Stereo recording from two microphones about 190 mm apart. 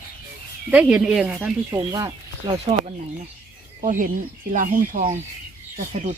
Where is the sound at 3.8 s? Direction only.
40° right (ahead or behind).